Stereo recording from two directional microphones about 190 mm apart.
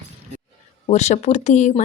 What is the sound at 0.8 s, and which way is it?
Speech, 35° left (ahead or behind).